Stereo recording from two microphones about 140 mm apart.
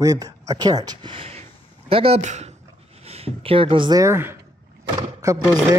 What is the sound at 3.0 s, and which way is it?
Speech, 45° right (ahead or behind).